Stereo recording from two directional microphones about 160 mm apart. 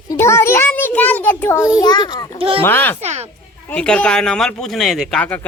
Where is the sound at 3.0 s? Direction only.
40° right (ahead or behind).